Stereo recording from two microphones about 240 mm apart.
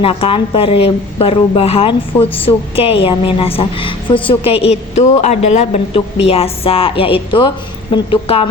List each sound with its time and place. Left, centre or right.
0.0 s a woman's voice: left